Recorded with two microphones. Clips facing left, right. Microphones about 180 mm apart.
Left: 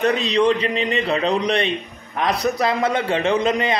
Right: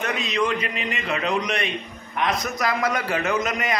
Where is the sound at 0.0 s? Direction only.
35° left (ahead or behind).